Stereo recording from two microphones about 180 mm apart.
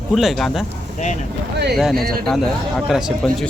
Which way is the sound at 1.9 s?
55° right (ahead or behind).